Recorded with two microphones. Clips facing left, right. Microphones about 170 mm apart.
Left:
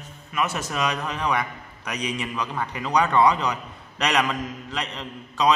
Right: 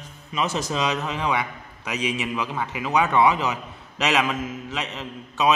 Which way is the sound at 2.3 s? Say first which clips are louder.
Right 1 dB; 5° right (ahead or behind).